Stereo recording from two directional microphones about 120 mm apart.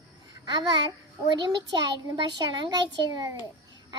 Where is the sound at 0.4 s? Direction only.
40° right (ahead or behind).